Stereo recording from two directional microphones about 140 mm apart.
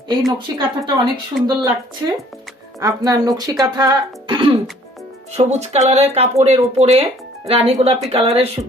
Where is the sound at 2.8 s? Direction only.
25° right (ahead or behind).